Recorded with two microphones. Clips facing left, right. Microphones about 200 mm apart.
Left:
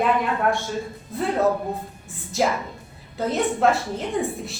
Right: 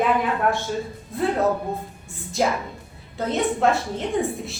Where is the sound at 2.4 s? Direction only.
Centre (ahead or behind).